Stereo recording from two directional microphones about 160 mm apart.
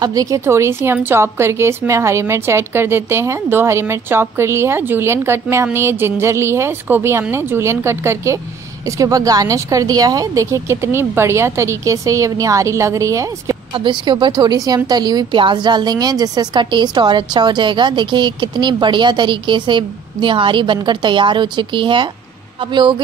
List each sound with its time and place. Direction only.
0.0 s a woman's voice: 20° right (ahead or behind)